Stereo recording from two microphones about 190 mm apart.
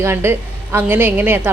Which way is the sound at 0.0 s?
15° right (ahead or behind).